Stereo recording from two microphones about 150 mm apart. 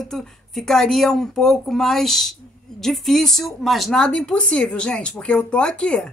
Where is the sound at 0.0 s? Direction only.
5° left (ahead or behind).